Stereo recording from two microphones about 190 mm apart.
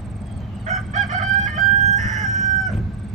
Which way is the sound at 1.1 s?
40° right (ahead or behind).